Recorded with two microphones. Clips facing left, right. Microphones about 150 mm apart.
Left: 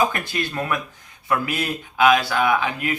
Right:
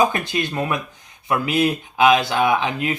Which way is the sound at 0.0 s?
20° right (ahead or behind).